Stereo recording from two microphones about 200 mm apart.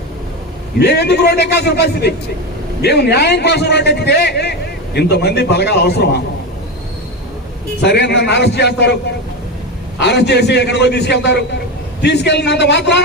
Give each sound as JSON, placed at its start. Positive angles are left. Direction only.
{"t": 0.8, "sound": "a man's voice", "side_deg": 55}
{"t": 7.8, "sound": "a man's voice", "side_deg": 60}
{"t": 10.0, "sound": "a man's voice", "side_deg": 55}